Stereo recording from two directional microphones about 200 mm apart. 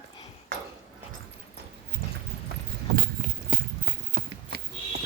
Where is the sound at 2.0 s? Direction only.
50° right (ahead or behind).